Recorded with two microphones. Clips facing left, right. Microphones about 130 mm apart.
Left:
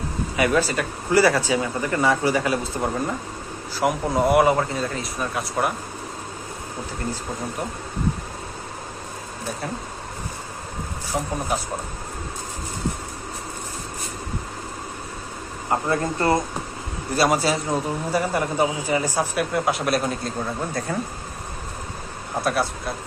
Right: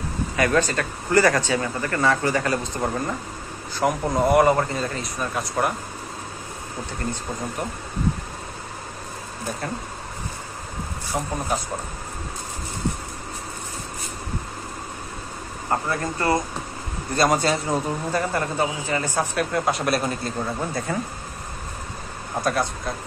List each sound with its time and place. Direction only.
0.4 s a man's voice: 10° left (ahead or behind)
11.1 s a man's voice: centre (ahead or behind)
15.7 s speech: 20° left (ahead or behind)
17.1 s a man's voice: 5° left (ahead or behind)
18.3 s a man's voice: 15° left (ahead or behind)
22.4 s a man's voice: 5° left (ahead or behind)